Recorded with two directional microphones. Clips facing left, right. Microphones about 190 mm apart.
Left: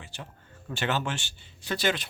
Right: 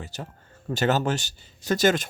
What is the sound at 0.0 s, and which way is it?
Speech, 40° right (ahead or behind).